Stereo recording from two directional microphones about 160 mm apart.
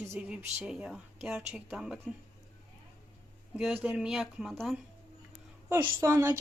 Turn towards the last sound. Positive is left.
turn(degrees=-15)  # may be behind; listen again after turning